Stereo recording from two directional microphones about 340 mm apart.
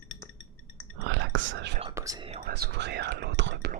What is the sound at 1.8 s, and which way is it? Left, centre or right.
Whispering, centre.